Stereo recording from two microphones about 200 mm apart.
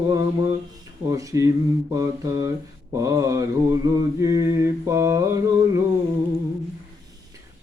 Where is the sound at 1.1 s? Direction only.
15° right (ahead or behind).